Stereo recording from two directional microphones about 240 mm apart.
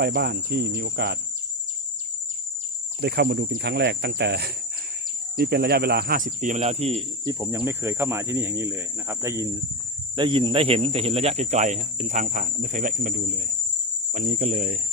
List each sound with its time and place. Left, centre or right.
0.0 s cricket: right
3.0 s speech: right
14.1 s cricket: right